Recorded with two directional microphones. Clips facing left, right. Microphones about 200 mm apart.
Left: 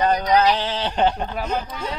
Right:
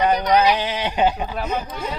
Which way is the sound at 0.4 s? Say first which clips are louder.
Right 1 dB; 15° right (ahead or behind).